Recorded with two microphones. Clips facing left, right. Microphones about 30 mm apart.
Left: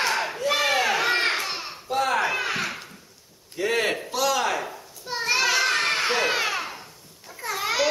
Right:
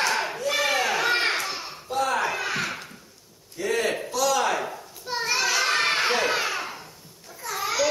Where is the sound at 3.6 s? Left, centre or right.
Left.